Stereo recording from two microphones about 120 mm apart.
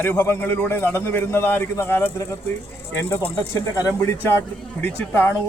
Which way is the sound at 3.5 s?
25° left (ahead or behind).